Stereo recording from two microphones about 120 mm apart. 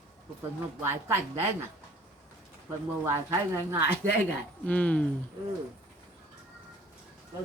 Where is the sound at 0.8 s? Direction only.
20° right (ahead or behind).